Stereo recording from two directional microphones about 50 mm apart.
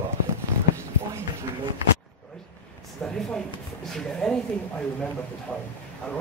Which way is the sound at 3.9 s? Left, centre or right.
Centre.